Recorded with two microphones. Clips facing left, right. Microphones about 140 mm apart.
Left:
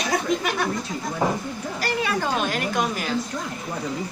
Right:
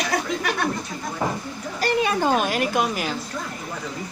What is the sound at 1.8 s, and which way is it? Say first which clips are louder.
A woman's voice: right 4 dB; 20° right (ahead or behind).